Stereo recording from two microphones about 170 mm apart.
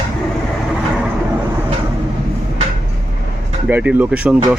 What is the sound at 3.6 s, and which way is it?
Speech, 5° right (ahead or behind).